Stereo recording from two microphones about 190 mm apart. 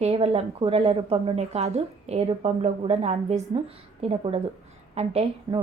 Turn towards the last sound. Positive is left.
turn(degrees=-30)  # may be behind; listen again after turning